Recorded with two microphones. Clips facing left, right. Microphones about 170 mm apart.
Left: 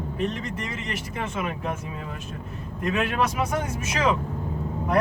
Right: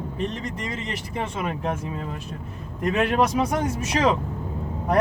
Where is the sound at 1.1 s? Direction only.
35° right (ahead or behind).